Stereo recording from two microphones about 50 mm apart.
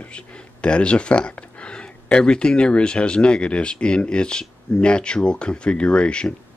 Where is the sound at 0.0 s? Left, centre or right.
Left.